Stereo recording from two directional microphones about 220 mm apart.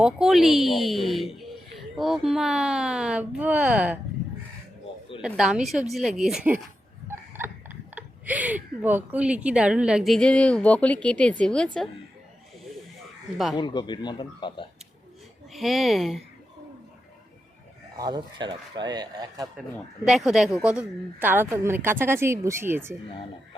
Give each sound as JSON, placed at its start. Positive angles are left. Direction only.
{"t": 0.0, "sound": "speech", "side_deg": 0}
{"t": 5.2, "sound": "speech", "side_deg": -5}
{"t": 7.9, "sound": "speech", "side_deg": -5}
{"t": 13.6, "sound": "speech", "side_deg": 20}
{"t": 15.5, "sound": "speech", "side_deg": 0}
{"t": 17.9, "sound": "speech", "side_deg": -20}
{"t": 20.1, "sound": "a woman's voice", "side_deg": 0}